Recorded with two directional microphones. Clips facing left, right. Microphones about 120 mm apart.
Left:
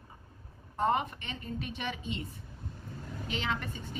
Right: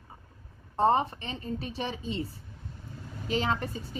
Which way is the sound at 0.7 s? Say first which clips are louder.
Right 5 dB; 35° right (ahead or behind).